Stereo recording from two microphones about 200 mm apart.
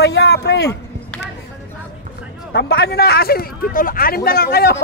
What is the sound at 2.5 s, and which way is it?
Speech, 55° left (ahead or behind).